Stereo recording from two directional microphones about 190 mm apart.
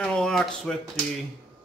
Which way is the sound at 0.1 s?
5° left (ahead or behind).